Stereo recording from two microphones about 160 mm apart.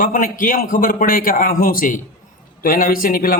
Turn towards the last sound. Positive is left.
turn(degrees=60)  # may be behind; listen again after turning